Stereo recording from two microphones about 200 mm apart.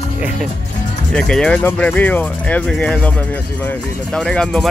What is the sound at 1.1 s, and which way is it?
Speech, 5° left (ahead or behind).